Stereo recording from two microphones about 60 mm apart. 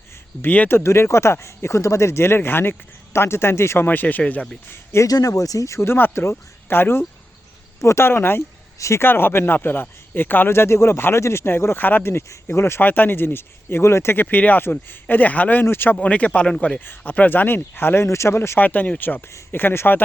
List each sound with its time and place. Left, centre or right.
0.4 s speech: left
0.7 s speech: left
3.8 s speech: left
4.7 s speech: left
5.0 s a man's voice: left
8.8 s speech: left
9.0 s a man's voice: left
12.5 s speech: left
12.8 s a man's voice: left
15.6 s a man's voice: left
16.0 s speech: left
17.0 s a man's voice: left
18.6 s a man's voice: left